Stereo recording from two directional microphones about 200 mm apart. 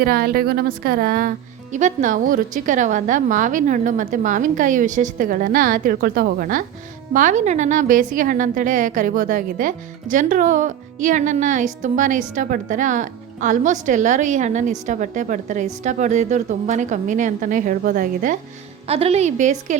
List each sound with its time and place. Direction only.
0.0 s a woman's voice: 50° right (ahead or behind)
18.9 s a woman's voice: 30° right (ahead or behind)